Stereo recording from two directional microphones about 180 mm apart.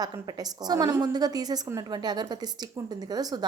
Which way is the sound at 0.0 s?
20° right (ahead or behind).